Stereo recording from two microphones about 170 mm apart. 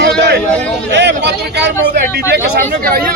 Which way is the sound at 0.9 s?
90° right.